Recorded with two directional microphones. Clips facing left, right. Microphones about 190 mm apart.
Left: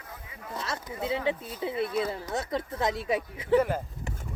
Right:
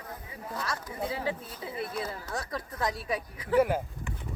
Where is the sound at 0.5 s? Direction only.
25° left (ahead or behind).